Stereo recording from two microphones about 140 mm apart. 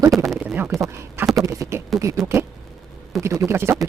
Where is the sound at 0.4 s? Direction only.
15° right (ahead or behind).